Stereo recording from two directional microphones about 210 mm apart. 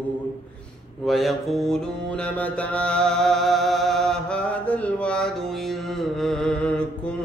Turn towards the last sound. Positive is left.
turn(degrees=5)  # may be behind; listen again after turning